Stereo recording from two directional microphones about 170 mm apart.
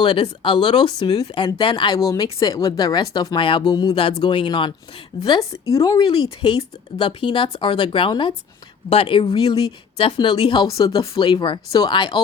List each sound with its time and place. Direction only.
0.0 s speech: 30° left (ahead or behind)
5.6 s speech: 20° left (ahead or behind)